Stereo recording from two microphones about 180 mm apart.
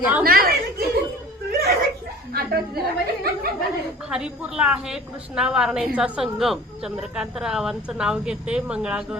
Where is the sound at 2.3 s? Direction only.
60° right (ahead or behind).